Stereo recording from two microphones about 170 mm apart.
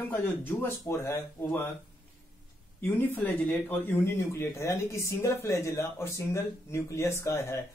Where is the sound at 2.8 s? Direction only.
10° left (ahead or behind).